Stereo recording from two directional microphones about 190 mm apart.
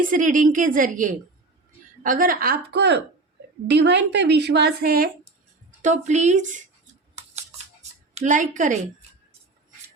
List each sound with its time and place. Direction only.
0.0 s a woman's voice: 45° right (ahead or behind)
5.8 s speech: 40° right (ahead or behind)
7.8 s speech: 35° right (ahead or behind)